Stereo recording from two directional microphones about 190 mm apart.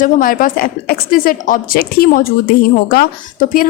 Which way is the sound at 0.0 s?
45° left (ahead or behind).